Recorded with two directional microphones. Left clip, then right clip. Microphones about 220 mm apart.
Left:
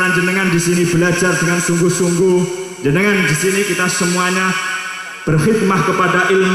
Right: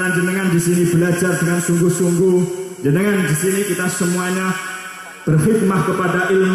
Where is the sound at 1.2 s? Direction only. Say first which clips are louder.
Left 4 dB; 20° right (ahead or behind).